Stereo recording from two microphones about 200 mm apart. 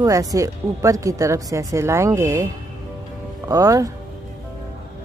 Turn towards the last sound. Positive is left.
turn(degrees=-15)  # may be behind; listen again after turning